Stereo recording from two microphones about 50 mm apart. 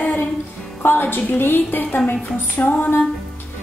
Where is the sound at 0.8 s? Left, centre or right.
Left.